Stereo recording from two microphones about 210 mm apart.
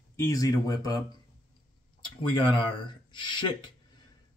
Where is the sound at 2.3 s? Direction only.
20° left (ahead or behind).